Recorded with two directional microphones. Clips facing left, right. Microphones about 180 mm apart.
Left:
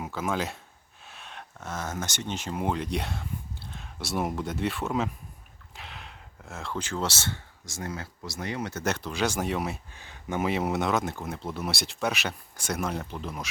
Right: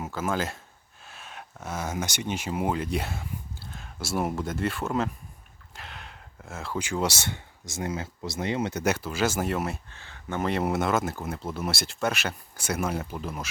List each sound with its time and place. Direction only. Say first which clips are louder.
0.0 s speech: right 1 dB; centre (ahead or behind); by 8.8 s 25° right (ahead or behind)
8.8 s speech: left 1 dB; 5° right (ahead or behind)
9.9 s speech: left 1 dB; 15° left (ahead or behind)
10.5 s speech: right 2 dB; centre (ahead or behind)